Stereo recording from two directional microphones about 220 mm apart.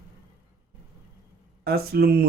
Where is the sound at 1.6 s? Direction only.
45° right (ahead or behind).